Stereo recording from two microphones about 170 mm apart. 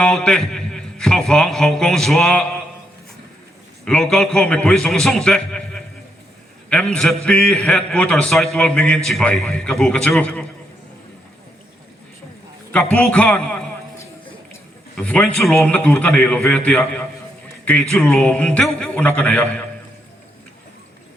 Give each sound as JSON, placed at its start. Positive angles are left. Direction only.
{"t": 0.0, "sound": "a man's voice", "side_deg": 5}
{"t": 3.8, "sound": "a man's voice", "side_deg": 5}
{"t": 12.7, "sound": "a man's voice", "side_deg": 5}
{"t": 14.9, "sound": "a man's voice", "side_deg": 5}